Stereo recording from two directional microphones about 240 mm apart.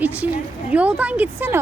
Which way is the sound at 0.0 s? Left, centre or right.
Centre.